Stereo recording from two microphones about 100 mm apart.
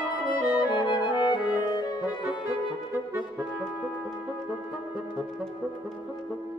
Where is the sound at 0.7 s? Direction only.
50° left (ahead or behind).